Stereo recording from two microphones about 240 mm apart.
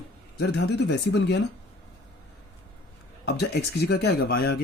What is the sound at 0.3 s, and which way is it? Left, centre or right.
Speech, left.